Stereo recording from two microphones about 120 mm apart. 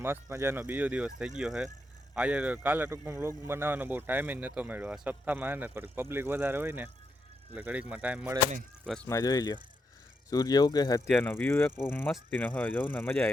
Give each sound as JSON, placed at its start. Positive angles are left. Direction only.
{"t": 0.0, "sound": "speech", "side_deg": -20}
{"t": 9.0, "sound": "speech", "side_deg": 30}
{"t": 11.1, "sound": "speech", "side_deg": 15}